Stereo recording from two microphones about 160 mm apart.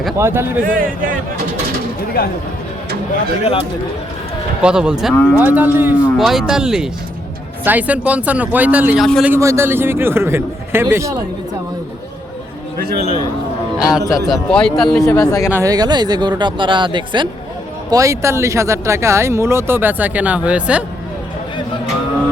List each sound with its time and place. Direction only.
0.2 s speech: 15° right (ahead or behind)
0.7 s speech: 60° right (ahead or behind)
2.2 s speech: 70° left (ahead or behind)
4.6 s speech: 5° right (ahead or behind)
5.1 s speech: 10° left (ahead or behind)
5.4 s speech: 10° right (ahead or behind)
13.7 s a man's voice: 5° right (ahead or behind)
15.0 s speech: 20° left (ahead or behind)
15.5 s speech: 20° right (ahead or behind)
17.9 s speech: 20° right (ahead or behind)